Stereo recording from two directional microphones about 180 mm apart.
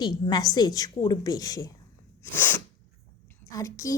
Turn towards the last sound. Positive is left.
turn(degrees=20)  # may be behind; listen again after turning